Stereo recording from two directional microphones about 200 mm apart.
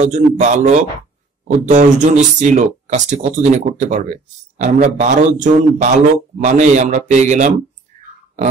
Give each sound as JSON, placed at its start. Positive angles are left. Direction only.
{"t": 0.0, "sound": "a man's voice", "side_deg": -35}